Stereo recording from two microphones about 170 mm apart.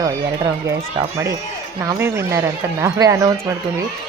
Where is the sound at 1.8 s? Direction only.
15° right (ahead or behind).